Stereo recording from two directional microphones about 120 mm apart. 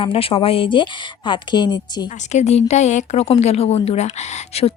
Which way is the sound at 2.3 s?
65° left (ahead or behind).